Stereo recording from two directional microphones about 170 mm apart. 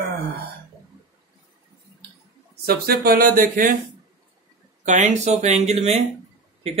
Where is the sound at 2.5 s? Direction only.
70° right (ahead or behind).